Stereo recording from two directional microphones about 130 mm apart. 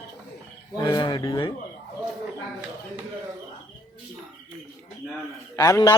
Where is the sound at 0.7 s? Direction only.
30° left (ahead or behind).